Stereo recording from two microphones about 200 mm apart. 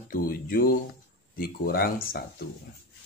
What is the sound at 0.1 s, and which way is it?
A man's voice, 45° left (ahead or behind).